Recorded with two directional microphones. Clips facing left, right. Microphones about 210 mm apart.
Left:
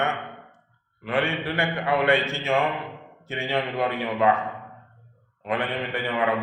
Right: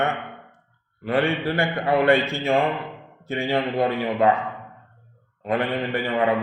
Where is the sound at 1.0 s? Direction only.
35° right (ahead or behind).